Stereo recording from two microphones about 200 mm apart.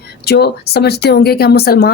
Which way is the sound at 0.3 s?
55° left (ahead or behind).